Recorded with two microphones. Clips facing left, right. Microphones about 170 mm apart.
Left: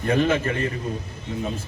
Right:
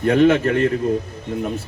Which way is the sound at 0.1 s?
70° right (ahead or behind).